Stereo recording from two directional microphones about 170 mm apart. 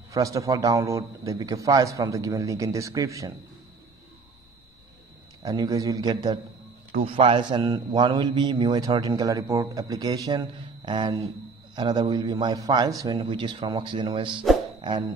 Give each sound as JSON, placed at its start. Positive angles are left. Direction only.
{"t": 0.1, "sound": "a man's voice", "side_deg": -20}
{"t": 5.4, "sound": "a man's voice", "side_deg": -20}
{"t": 7.0, "sound": "a man's voice", "side_deg": -35}
{"t": 14.8, "sound": "music", "side_deg": -25}